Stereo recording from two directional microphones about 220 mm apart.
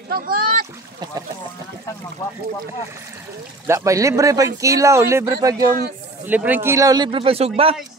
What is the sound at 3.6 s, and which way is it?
Speech, 15° right (ahead or behind).